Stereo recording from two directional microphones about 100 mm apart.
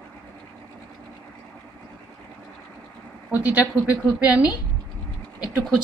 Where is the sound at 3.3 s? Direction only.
15° right (ahead or behind).